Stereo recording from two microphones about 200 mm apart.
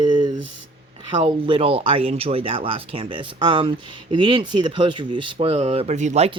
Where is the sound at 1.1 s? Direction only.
25° right (ahead or behind).